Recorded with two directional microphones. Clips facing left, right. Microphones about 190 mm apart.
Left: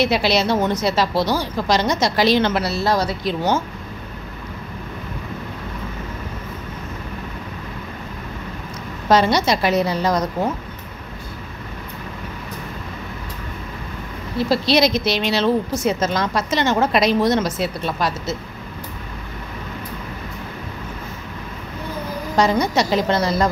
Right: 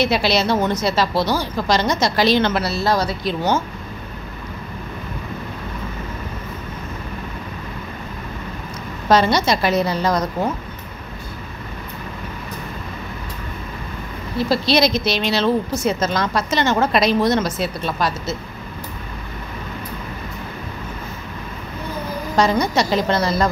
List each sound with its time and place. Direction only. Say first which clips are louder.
0.0 s a woman's voice: even; 15° left (ahead or behind)
9.1 s a woman's voice: even; 15° left (ahead or behind)
14.5 s a woman's voice: even; 15° left (ahead or behind)
22.3 s a woman's voice: even; 15° left (ahead or behind)